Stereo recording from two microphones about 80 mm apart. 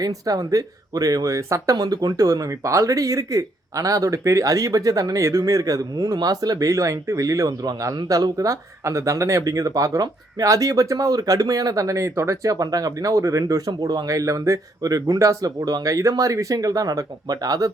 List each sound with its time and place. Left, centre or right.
0.0 s speech: right